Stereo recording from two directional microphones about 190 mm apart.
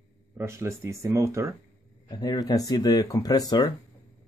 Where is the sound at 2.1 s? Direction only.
20° left (ahead or behind).